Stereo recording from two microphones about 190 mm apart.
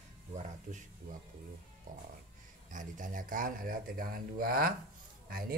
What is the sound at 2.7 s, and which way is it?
Speech, 45° right (ahead or behind).